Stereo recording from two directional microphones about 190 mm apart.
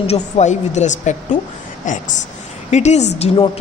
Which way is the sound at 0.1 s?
35° left (ahead or behind).